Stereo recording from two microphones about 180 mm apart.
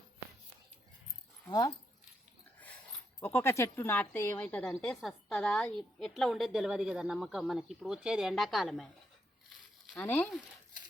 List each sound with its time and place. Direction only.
1.5 s speech: 20° left (ahead or behind)
3.2 s a woman's voice: 10° left (ahead or behind)
9.9 s speech: 10° left (ahead or behind)